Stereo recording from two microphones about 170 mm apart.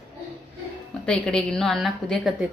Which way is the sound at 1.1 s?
5° left (ahead or behind).